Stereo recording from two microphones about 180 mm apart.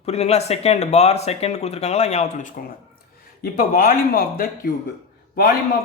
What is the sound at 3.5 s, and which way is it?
Speech, 55° left (ahead or behind).